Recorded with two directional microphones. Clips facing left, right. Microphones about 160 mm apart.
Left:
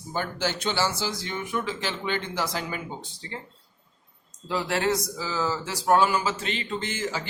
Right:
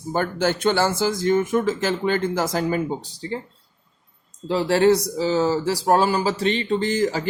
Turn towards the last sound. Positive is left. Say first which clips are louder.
# right 9 dB
turn(degrees=-40)  # may be behind; listen again after turning